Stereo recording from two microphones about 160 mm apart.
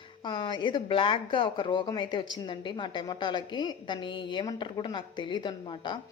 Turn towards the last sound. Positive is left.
turn(degrees=30)  # may be behind; listen again after turning